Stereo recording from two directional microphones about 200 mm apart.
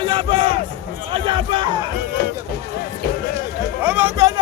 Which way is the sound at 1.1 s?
25° right (ahead or behind).